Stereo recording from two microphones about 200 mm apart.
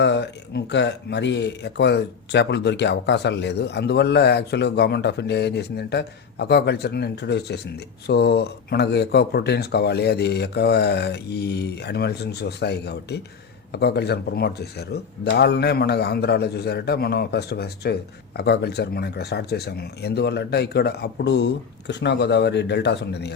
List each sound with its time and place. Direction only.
0.0 s speech: 60° left (ahead or behind)